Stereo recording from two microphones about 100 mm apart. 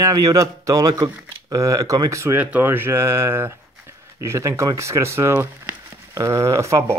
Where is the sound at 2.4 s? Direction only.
15° right (ahead or behind).